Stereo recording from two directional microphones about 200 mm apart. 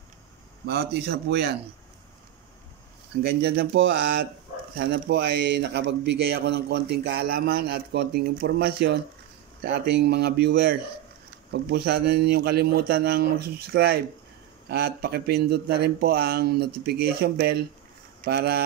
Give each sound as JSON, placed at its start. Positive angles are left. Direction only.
{"t": 0.7, "sound": "speech", "side_deg": -50}
{"t": 3.3, "sound": "speech", "side_deg": -50}
{"t": 4.7, "sound": "a man's voice", "side_deg": -60}